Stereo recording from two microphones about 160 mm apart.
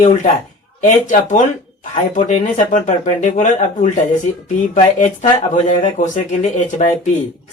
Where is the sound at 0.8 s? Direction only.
55° left (ahead or behind).